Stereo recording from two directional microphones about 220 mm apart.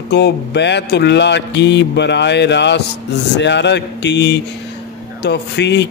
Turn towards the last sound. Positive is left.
turn(degrees=50)  # may be behind; listen again after turning